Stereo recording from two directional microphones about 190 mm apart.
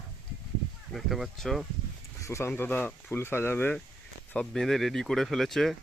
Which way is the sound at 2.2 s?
15° left (ahead or behind).